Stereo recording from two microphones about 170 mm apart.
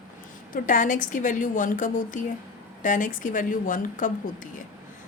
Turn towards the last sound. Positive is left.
turn(degrees=50)  # may be behind; listen again after turning